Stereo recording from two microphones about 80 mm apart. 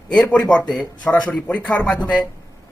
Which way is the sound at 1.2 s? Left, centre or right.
Centre.